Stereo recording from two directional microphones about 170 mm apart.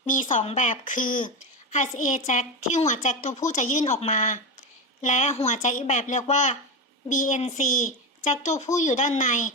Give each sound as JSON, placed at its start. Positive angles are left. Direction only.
{"t": 0.0, "sound": "a woman's voice", "side_deg": 50}